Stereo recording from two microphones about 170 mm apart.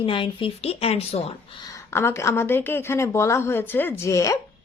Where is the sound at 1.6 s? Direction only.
15° left (ahead or behind).